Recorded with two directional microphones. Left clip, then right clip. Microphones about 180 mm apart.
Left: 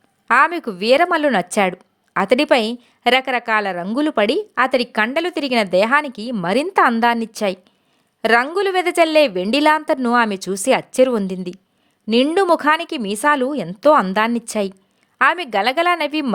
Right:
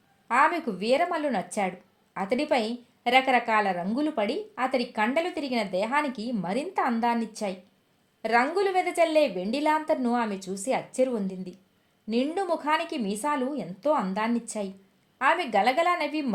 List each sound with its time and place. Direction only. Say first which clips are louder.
0.3 s a woman's voice: left 8 dB; 55° left (ahead or behind)